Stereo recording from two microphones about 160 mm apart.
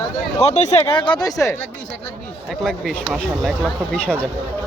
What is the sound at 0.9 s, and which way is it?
Speech, 30° left (ahead or behind).